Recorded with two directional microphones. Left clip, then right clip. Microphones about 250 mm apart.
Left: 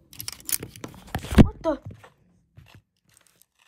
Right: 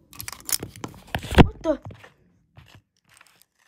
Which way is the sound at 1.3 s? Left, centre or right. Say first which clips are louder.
Right 2 dB; centre.